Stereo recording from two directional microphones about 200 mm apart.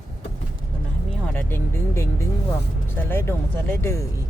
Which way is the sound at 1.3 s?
10° left (ahead or behind).